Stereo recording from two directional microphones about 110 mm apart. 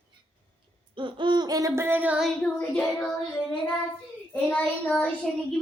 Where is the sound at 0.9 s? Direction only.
45° right (ahead or behind); by 2.2 s 15° right (ahead or behind).